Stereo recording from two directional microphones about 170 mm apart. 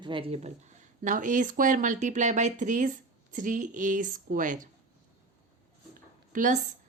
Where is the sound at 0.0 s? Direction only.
30° right (ahead or behind); by 4.7 s 50° right (ahead or behind).